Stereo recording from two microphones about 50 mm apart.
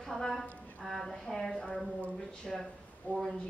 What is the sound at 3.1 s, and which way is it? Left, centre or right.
Speech, left.